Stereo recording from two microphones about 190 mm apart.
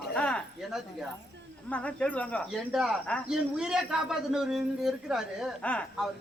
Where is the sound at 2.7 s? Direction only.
5° right (ahead or behind).